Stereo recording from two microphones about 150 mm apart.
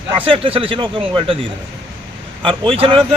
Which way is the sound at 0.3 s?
40° right (ahead or behind).